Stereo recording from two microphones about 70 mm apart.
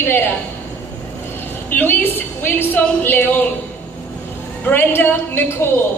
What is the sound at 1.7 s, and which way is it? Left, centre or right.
A woman's voice, left.